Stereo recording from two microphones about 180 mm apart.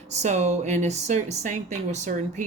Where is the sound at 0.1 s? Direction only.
40° right (ahead or behind).